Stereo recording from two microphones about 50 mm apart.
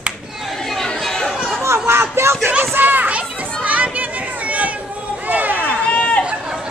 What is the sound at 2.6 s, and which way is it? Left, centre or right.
Children playing, right.